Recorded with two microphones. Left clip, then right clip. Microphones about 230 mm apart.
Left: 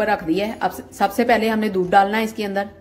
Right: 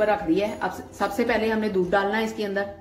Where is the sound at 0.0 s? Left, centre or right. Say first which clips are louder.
Left 2 dB; left.